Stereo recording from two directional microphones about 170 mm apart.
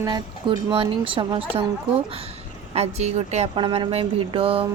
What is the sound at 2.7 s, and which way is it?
Speech, 40° right (ahead or behind).